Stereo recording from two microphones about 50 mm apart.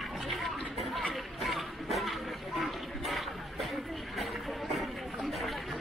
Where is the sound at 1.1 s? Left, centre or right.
Centre.